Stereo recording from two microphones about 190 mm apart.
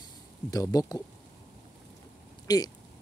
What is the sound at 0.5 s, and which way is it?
Speech, 20° left (ahead or behind).